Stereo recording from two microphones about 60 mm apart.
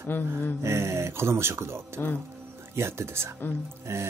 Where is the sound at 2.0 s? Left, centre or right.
Left.